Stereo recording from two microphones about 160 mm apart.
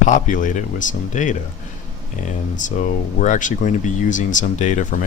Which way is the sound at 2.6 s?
50° left (ahead or behind).